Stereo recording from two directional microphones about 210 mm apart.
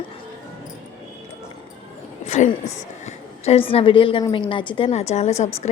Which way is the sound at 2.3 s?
35° left (ahead or behind).